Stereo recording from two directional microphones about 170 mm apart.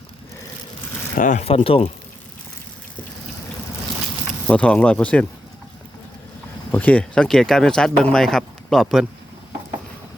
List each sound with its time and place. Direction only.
1.1 s speech: 50° left (ahead or behind)
1.5 s speech: 35° left (ahead or behind)
4.4 s speech: 5° left (ahead or behind)
6.7 s speech: 10° left (ahead or behind)